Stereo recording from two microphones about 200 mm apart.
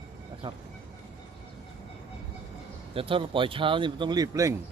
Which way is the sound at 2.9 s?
25° right (ahead or behind).